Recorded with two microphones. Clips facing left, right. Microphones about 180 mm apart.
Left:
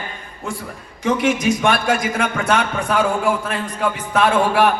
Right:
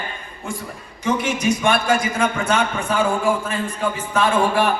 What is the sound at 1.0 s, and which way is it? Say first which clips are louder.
A man's voice: left 3 dB; 65° left (ahead or behind).